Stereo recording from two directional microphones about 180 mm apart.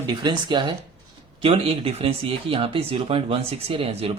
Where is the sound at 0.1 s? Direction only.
25° right (ahead or behind).